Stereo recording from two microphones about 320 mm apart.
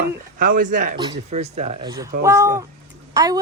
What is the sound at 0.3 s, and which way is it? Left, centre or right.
A woman's voice, right.